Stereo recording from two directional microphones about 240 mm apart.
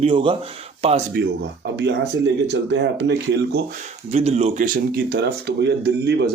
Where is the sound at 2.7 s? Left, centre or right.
Right.